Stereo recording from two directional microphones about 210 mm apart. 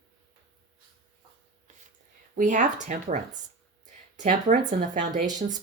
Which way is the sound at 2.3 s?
40° right (ahead or behind).